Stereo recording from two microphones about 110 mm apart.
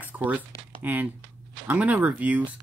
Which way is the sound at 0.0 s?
15° right (ahead or behind).